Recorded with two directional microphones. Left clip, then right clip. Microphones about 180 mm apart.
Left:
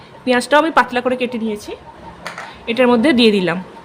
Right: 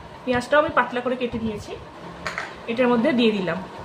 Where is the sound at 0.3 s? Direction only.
65° left (ahead or behind).